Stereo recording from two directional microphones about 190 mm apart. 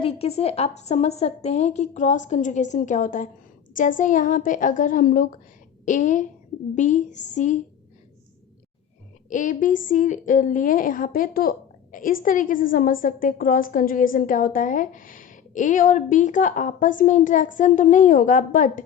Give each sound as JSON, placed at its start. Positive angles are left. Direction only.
{"t": 0.0, "sound": "a woman's voice", "side_deg": 30}
{"t": 9.3, "sound": "a woman's voice", "side_deg": 45}